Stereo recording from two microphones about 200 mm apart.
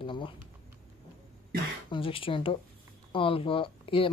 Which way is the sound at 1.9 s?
25° left (ahead or behind).